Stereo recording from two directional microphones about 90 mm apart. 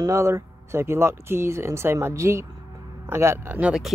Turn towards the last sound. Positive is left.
turn(degrees=-5)  # may be behind; listen again after turning